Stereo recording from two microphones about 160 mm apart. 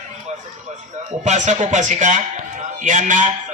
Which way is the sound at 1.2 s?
45° right (ahead or behind).